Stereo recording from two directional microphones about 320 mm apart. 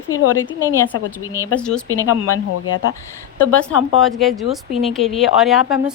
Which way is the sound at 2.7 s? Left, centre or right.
Left.